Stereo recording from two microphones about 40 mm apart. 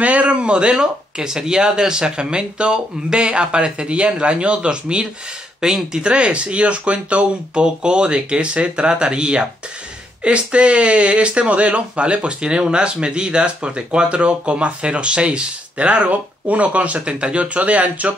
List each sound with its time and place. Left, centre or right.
0.0 s speech: right